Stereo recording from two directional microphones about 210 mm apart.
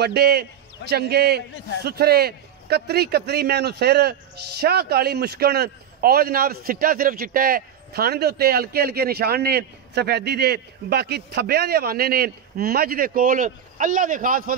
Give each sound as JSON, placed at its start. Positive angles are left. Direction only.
{"t": 0.0, "sound": "a man's voice", "side_deg": -50}